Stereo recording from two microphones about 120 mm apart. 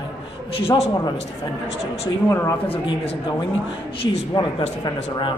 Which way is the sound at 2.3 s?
25° left (ahead or behind).